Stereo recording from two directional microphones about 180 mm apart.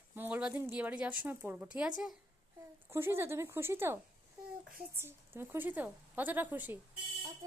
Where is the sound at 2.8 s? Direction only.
15° right (ahead or behind).